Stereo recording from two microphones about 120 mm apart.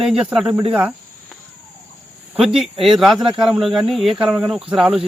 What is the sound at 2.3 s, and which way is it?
Speech, 5° right (ahead or behind).